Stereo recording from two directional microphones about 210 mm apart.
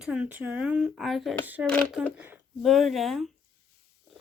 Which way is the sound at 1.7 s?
5° left (ahead or behind).